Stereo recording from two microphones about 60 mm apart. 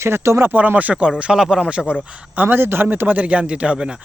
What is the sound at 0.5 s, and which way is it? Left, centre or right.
Speech, right.